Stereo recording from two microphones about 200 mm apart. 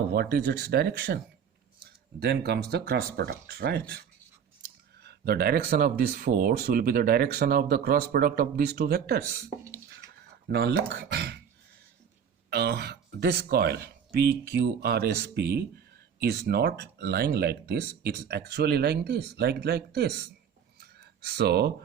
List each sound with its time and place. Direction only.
0.1 s speech: 50° right (ahead or behind)
5.0 s speech: 50° right (ahead or behind)
10.5 s speech: 55° right (ahead or behind)
11.1 s beatboxing: 55° right (ahead or behind)
12.5 s speech: 50° right (ahead or behind)
20.8 s a sound: 55° right (ahead or behind)